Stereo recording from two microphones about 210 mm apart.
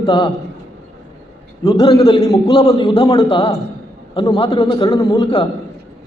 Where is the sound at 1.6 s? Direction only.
20° left (ahead or behind).